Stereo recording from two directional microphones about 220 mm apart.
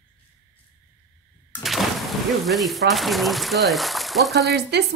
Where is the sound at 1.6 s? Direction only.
Centre (ahead or behind).